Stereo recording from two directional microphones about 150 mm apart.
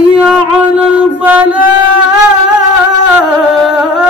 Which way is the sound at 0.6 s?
10° right (ahead or behind).